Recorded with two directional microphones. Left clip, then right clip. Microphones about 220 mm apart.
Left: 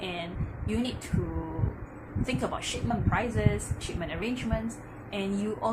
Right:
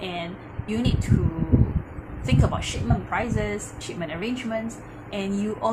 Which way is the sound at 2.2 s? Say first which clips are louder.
Right 5 dB; 15° right (ahead or behind).